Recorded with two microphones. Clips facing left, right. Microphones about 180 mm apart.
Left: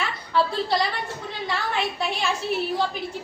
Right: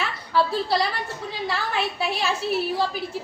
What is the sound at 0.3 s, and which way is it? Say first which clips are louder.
A woman's voice: right 1 dB; 5° right (ahead or behind).